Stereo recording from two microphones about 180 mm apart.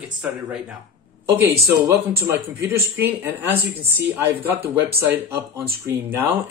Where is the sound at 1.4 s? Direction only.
20° right (ahead or behind).